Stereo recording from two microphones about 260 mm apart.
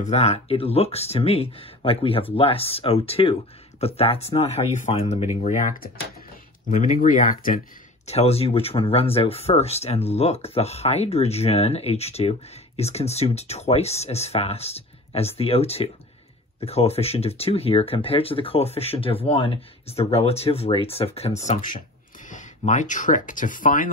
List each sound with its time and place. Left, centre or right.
0.0 s speech: left